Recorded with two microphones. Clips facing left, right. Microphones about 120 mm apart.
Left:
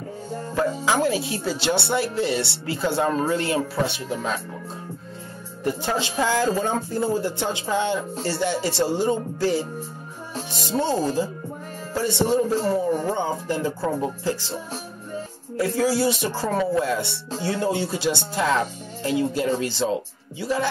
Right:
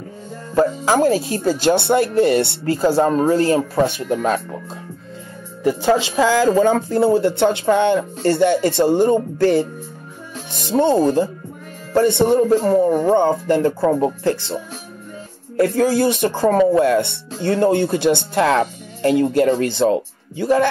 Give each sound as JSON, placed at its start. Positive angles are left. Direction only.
{"t": 0.6, "sound": "speech", "side_deg": -40}
{"t": 5.7, "sound": "speech", "side_deg": -90}